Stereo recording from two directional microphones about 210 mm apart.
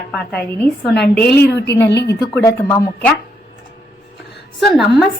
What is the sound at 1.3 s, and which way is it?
Speech, 55° left (ahead or behind).